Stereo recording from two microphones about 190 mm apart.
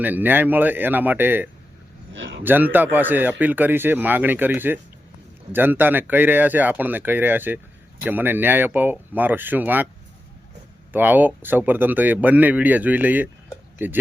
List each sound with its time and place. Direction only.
0.0 s speech: 10° right (ahead or behind)
2.1 s a sound: 70° right (ahead or behind)
2.4 s speech: 10° right (ahead or behind)
10.9 s speech: 10° right (ahead or behind)